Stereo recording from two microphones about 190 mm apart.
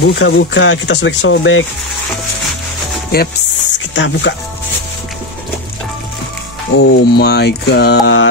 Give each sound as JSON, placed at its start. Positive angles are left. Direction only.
{"t": 0.0, "sound": "speech", "side_deg": 70}
{"t": 3.1, "sound": "speech", "side_deg": 55}
{"t": 3.9, "sound": "speech", "side_deg": 70}
{"t": 6.8, "sound": "mantra", "side_deg": 60}